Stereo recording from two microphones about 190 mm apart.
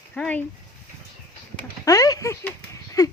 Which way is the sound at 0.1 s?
5° left (ahead or behind).